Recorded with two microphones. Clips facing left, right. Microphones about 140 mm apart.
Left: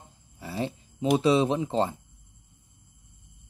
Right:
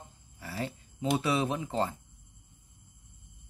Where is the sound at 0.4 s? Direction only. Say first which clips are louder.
Left 5 dB; 20° left (ahead or behind).